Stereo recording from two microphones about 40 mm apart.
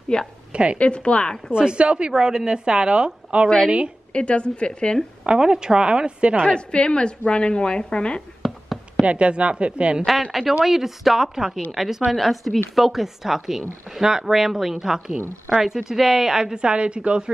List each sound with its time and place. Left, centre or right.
0.1 s a woman's voice: left
0.5 s a woman's voice: right
0.7 s a woman's voice: left
1.5 s speech: right
4.1 s a woman's voice: left
5.2 s speech: right
6.4 s a woman's voice: left
8.4 s a sound: centre
9.0 s speech: right
10.6 s a woman's voice: centre; by 17.3 s right